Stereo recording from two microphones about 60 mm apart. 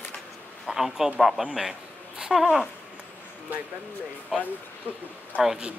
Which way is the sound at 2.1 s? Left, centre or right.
Centre.